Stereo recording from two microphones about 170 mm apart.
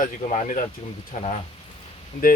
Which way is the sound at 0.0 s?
45° left (ahead or behind).